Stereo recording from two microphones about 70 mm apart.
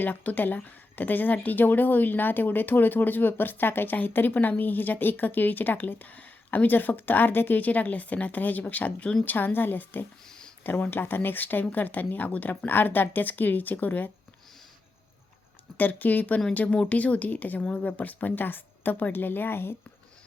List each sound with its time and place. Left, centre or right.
0.0 s speech: left
10.2 s a sound: centre
10.6 s speech: left
15.8 s speech: left